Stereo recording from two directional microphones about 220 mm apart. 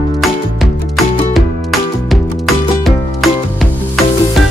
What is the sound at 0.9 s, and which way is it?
Music, centre (ahead or behind).